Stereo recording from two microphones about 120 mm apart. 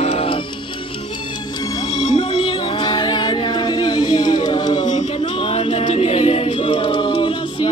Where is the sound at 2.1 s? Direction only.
50° left (ahead or behind).